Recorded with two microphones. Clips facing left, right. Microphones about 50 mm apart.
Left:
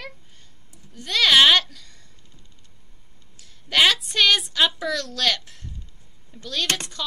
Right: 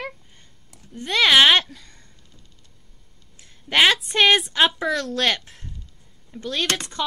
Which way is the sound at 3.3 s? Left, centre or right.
Right.